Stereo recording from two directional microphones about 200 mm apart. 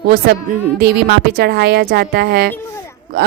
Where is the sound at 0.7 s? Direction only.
50° right (ahead or behind).